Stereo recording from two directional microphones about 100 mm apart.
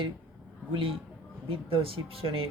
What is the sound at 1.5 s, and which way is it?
Speech, 65° right (ahead or behind).